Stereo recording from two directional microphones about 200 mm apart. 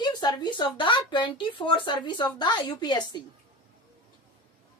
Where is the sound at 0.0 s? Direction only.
20° left (ahead or behind).